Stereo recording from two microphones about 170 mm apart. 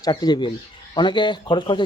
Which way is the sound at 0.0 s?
25° left (ahead or behind).